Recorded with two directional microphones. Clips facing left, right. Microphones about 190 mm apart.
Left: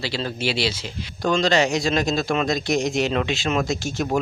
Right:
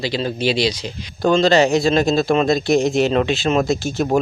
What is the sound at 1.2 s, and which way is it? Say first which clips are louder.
Speech: right 5 dB; 30° right (ahead or behind).